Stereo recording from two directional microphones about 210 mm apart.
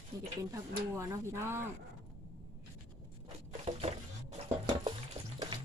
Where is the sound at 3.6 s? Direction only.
30° right (ahead or behind).